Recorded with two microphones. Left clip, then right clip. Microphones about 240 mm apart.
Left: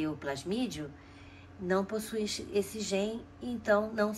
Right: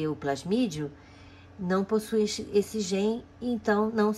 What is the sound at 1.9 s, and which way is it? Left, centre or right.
Speech, right.